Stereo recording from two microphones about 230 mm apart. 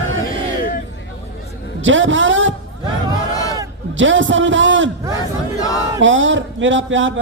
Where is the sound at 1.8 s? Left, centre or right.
Right.